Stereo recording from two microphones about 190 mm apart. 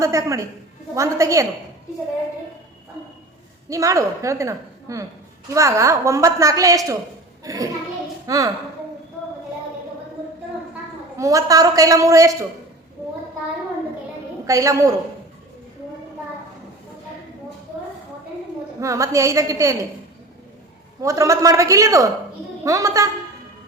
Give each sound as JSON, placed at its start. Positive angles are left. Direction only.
{"t": 0.0, "sound": "a woman's voice", "side_deg": -15}
{"t": 3.7, "sound": "a woman's voice", "side_deg": -15}
{"t": 7.4, "sound": "a sound", "side_deg": -20}
{"t": 8.3, "sound": "a woman's voice", "side_deg": -15}
{"t": 11.2, "sound": "a woman's voice", "side_deg": -15}
{"t": 14.4, "sound": "a woman's voice", "side_deg": -15}
{"t": 18.8, "sound": "a woman's voice", "side_deg": -15}
{"t": 21.0, "sound": "a woman's voice", "side_deg": -15}